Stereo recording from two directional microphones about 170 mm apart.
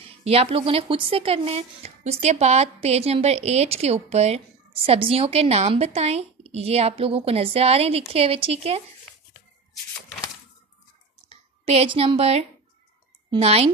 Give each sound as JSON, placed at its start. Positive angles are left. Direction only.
{"t": 0.0, "sound": "speech", "side_deg": -35}
{"t": 9.1, "sound": "a sound", "side_deg": 5}
{"t": 11.2, "sound": "speech", "side_deg": -35}